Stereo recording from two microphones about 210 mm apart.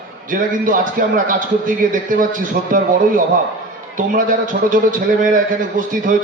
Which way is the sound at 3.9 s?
40° right (ahead or behind).